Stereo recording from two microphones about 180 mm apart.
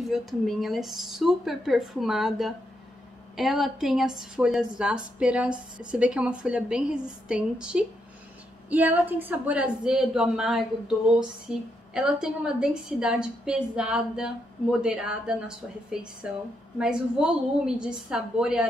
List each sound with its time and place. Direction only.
0.1 s a woman's voice: centre (ahead or behind)